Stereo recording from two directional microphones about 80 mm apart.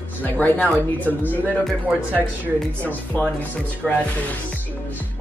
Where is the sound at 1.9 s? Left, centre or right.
Centre.